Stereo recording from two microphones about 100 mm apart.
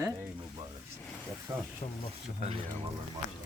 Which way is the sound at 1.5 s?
30° right (ahead or behind).